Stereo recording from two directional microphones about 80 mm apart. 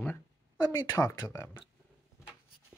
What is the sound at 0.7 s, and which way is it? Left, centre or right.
Speech, left.